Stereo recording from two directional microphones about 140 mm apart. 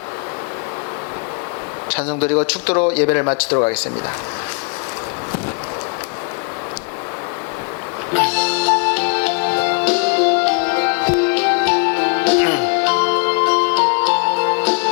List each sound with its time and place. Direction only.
1.9 s speech: 10° left (ahead or behind)
8.1 s music: 10° left (ahead or behind)